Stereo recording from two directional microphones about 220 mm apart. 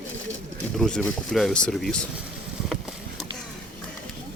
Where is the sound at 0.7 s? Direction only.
5° left (ahead or behind).